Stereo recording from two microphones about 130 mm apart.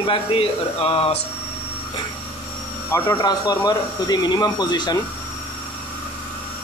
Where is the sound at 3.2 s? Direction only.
30° left (ahead or behind).